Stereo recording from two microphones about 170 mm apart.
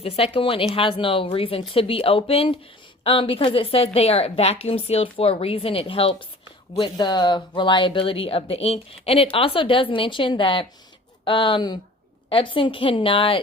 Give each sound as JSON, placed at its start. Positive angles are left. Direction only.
{"t": 0.0, "sound": "speech", "side_deg": 35}